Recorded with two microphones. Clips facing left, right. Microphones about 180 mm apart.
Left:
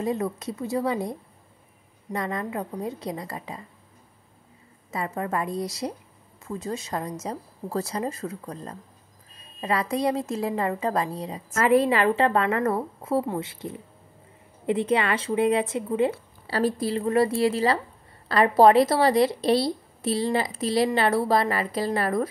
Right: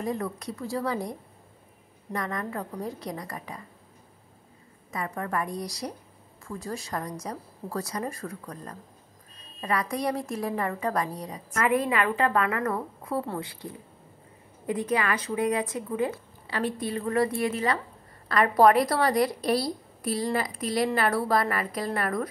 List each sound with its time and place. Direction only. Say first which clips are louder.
0.0 s a woman's voice: left 4 dB; 25° left (ahead or behind)
2.1 s a woman's voice: left 3 dB; 20° left (ahead or behind)
4.9 s a woman's voice: left 3 dB; 25° left (ahead or behind)